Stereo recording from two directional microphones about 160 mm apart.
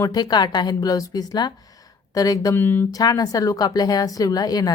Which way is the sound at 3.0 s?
25° left (ahead or behind).